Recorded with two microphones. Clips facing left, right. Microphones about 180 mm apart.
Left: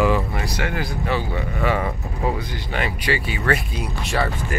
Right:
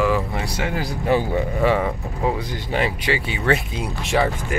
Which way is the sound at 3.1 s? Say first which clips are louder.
Left 1 dB; 20° right (ahead or behind).